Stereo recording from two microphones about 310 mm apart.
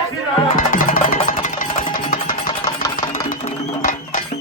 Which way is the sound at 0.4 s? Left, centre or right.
Left.